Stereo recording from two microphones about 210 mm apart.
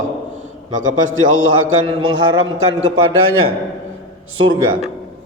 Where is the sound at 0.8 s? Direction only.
70° right (ahead or behind).